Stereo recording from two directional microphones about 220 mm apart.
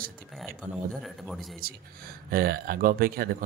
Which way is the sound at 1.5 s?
40° right (ahead or behind).